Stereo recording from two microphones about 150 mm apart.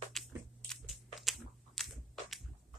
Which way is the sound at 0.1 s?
Centre (ahead or behind).